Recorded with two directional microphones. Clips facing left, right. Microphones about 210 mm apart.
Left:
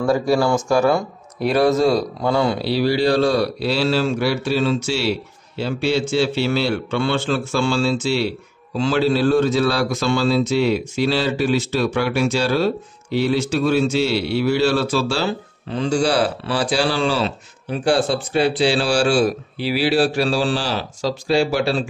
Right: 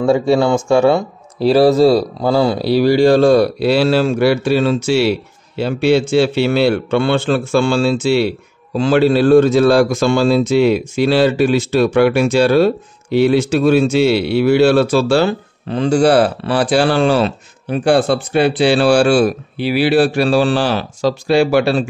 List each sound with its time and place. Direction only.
0.0 s a man's voice: 25° right (ahead or behind); by 21.8 s 60° right (ahead or behind)